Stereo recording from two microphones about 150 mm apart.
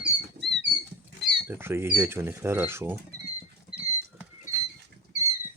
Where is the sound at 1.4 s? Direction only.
15° right (ahead or behind).